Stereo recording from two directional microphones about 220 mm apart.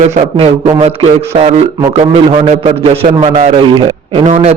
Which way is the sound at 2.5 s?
30° right (ahead or behind).